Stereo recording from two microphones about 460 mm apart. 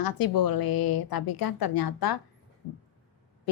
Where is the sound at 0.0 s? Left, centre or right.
Left.